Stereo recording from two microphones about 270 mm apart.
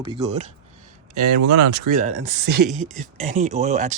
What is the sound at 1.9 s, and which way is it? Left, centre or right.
Speech, right.